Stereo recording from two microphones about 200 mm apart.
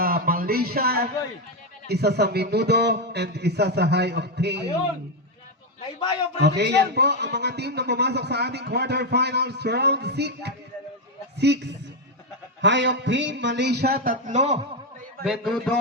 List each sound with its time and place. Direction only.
0.0 s a sound: 50° right (ahead or behind)
1.9 s a man's voice: 55° right (ahead or behind)
6.4 s a man's voice: 55° right (ahead or behind); by 14.6 s 35° right (ahead or behind)
15.2 s speech: centre (ahead or behind)